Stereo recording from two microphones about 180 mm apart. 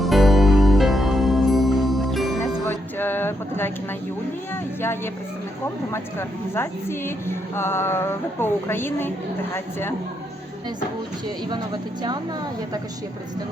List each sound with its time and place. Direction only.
0.0 s music: centre (ahead or behind)
2.6 s a sound: 10° left (ahead or behind)
5.9 s a woman's voice: 15° left (ahead or behind)